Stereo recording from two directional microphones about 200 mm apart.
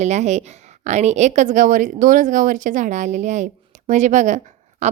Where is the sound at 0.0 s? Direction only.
35° right (ahead or behind).